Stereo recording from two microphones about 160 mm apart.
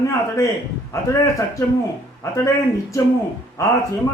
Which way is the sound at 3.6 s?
20° left (ahead or behind).